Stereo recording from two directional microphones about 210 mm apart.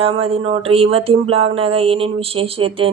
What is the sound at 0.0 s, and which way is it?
A woman's voice, 25° right (ahead or behind).